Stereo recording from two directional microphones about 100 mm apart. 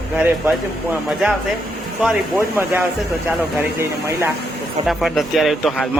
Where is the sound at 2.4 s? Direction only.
20° right (ahead or behind).